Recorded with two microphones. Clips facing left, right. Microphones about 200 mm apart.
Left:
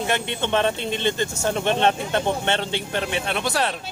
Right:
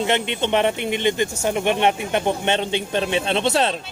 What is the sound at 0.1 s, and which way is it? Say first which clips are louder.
Speech: right 3 dB; 20° right (ahead or behind).